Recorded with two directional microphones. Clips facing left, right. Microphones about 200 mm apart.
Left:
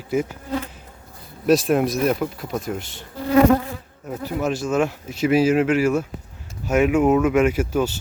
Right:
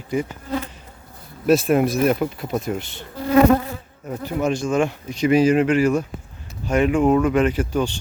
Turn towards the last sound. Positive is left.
turn(degrees=5)  # may be behind; listen again after turning